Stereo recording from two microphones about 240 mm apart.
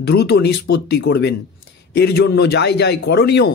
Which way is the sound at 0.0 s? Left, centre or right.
Left.